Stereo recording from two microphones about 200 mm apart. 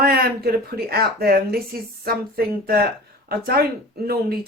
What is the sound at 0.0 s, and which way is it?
Speech, 50° right (ahead or behind).